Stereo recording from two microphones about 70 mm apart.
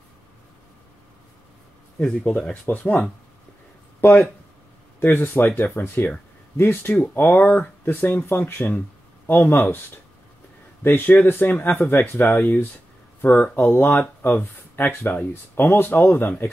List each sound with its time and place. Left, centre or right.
2.0 s speech: centre
2.6 s speech: left
4.0 s speech: left
10.8 s speech: left